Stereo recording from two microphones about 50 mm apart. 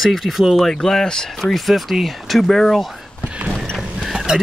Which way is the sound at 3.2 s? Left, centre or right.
Right.